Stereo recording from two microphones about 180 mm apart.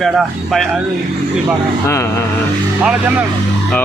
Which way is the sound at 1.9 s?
15° left (ahead or behind).